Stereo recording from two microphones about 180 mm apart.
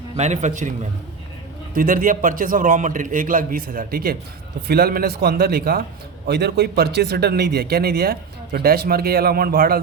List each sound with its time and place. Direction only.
0.2 s a man's voice: 40° right (ahead or behind)
1.7 s a man's voice: 50° right (ahead or behind)